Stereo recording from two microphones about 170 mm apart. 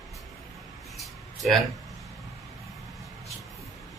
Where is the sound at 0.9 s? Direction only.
Centre (ahead or behind).